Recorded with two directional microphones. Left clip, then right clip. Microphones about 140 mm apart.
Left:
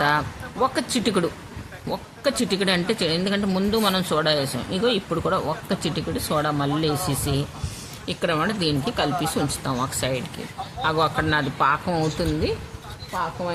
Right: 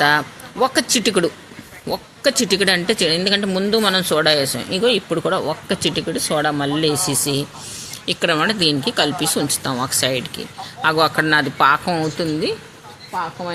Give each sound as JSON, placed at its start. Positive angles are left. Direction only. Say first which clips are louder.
{"t": 0.0, "sound": "speech", "louder": "right 5 dB", "side_deg": -20}
{"t": 12.2, "sound": "speech", "louder": "right 4 dB", "side_deg": -15}